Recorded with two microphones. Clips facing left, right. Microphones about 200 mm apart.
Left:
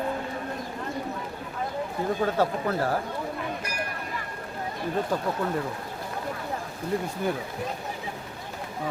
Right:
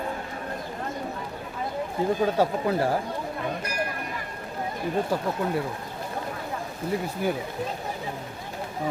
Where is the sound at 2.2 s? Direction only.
10° right (ahead or behind).